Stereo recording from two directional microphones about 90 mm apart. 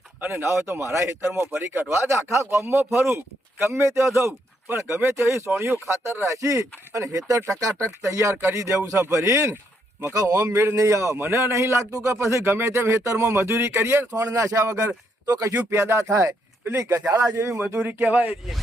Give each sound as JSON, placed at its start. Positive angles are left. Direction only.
{"t": 0.2, "sound": "speech", "side_deg": -25}